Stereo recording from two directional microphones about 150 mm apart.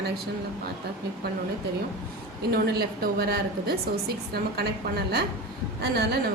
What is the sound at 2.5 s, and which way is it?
A woman's voice, 90° right.